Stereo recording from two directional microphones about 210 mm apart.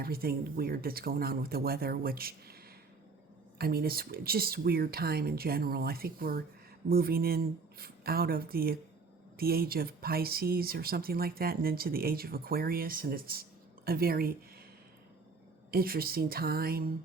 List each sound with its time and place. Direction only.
0.0 s speech: 45° right (ahead or behind)
3.6 s speech: 45° right (ahead or behind)
15.7 s speech: 45° right (ahead or behind)